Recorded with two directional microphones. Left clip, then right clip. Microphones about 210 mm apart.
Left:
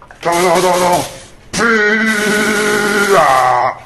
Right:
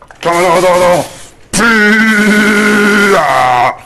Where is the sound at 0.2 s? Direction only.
50° right (ahead or behind).